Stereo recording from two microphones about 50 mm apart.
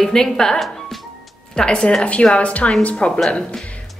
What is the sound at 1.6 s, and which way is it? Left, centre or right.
A woman's voice, centre.